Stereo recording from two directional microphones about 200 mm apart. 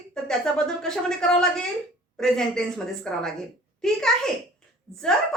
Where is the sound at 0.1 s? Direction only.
5° left (ahead or behind).